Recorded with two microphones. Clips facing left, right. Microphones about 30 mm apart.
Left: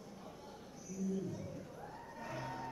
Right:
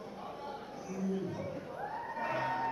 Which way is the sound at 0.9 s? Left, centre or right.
Right.